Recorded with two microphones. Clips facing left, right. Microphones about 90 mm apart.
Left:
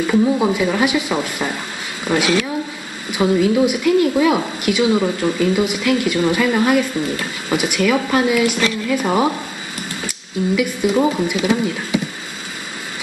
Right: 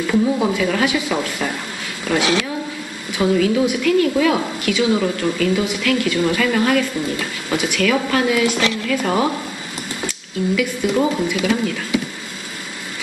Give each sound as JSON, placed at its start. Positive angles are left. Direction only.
{"t": 0.0, "sound": "a woman's voice", "side_deg": 10}